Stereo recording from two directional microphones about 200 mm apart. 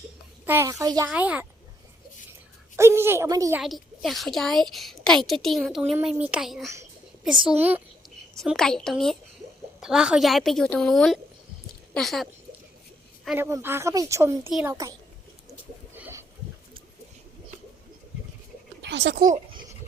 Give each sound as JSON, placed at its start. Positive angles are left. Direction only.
{"t": 0.4, "sound": "a woman's voice", "side_deg": -15}
{"t": 2.7, "sound": "a woman's voice", "side_deg": -15}
{"t": 3.6, "sound": "a woman's voice", "side_deg": 0}
{"t": 8.4, "sound": "a woman's voice", "side_deg": 0}
{"t": 13.2, "sound": "a woman's voice", "side_deg": -10}
{"t": 16.0, "sound": "a sound", "side_deg": -10}
{"t": 18.8, "sound": "a sound", "side_deg": -60}